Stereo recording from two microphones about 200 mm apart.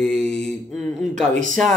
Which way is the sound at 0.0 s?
5° left (ahead or behind).